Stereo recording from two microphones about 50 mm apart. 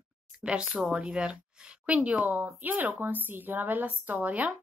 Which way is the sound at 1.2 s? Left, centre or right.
Centre.